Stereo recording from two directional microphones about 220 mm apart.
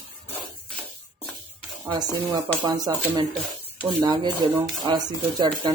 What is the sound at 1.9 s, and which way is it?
Speech, 15° right (ahead or behind).